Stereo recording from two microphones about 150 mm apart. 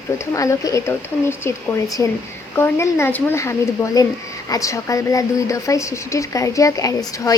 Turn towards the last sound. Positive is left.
turn(degrees=20)  # may be behind; listen again after turning